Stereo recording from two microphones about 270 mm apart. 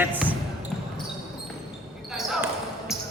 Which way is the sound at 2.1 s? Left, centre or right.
Centre.